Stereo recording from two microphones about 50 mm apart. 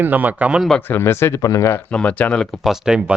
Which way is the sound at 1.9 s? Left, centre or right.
Left.